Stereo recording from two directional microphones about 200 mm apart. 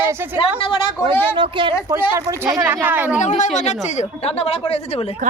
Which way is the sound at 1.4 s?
25° right (ahead or behind).